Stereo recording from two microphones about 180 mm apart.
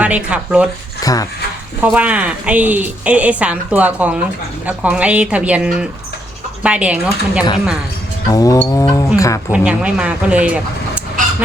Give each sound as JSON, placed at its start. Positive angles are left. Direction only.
{"t": 0.0, "sound": "a woman's voice", "side_deg": -5}
{"t": 1.0, "sound": "music", "side_deg": 20}
{"t": 1.8, "sound": "a woman's voice", "side_deg": -10}
{"t": 8.3, "sound": "music", "side_deg": 20}
{"t": 8.5, "sound": "livestock", "side_deg": 15}
{"t": 9.5, "sound": "a woman's voice", "side_deg": -5}